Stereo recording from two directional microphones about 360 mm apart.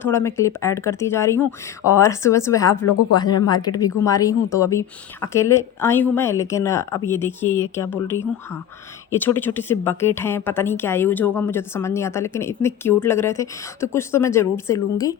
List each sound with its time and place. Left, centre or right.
0.0 s speech: centre
2.8 s speech: left
3.2 s speech: centre
9.2 s speech: centre